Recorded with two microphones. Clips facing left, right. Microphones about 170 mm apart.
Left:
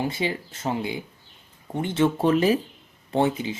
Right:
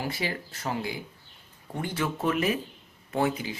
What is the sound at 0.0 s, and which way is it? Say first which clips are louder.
Speech: left 5 dB; 20° left (ahead or behind).